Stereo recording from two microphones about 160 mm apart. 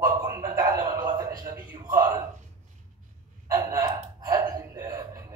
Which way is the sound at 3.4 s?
20° right (ahead or behind).